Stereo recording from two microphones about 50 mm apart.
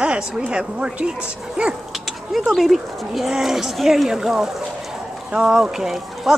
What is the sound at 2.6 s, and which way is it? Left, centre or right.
Speech, centre.